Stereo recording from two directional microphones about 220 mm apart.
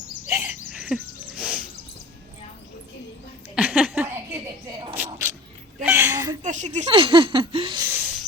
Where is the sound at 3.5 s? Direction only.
5° right (ahead or behind).